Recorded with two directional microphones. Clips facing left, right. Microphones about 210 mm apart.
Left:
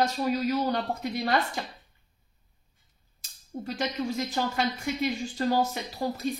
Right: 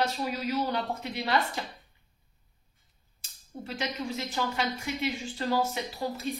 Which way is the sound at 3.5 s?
40° left (ahead or behind).